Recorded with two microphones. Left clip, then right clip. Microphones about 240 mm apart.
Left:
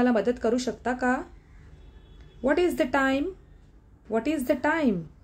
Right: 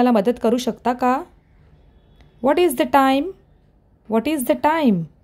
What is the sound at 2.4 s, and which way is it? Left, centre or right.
Speech, right.